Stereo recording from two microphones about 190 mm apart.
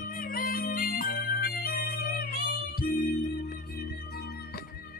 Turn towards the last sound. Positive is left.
turn(degrees=50)  # may be behind; listen again after turning